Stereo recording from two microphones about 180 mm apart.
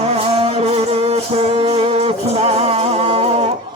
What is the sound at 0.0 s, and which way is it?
Music, 35° right (ahead or behind).